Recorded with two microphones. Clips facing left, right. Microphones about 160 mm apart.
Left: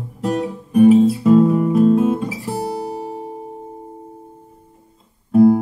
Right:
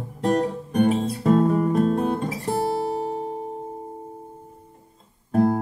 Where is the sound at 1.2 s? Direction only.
40° right (ahead or behind).